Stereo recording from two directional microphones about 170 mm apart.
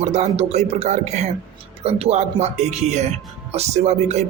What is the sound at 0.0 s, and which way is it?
Speech, 40° right (ahead or behind).